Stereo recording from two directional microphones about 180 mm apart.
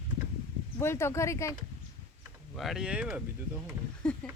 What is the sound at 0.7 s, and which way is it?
Speech, 15° left (ahead or behind).